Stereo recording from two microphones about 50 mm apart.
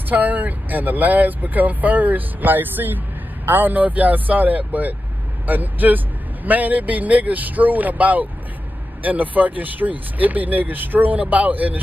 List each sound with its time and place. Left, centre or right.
0.1 s speech: right